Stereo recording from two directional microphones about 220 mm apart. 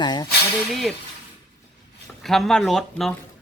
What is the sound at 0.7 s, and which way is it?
Speech, centre (ahead or behind).